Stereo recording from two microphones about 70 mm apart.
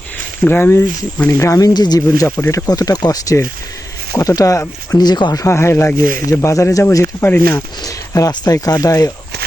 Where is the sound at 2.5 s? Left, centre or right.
Left.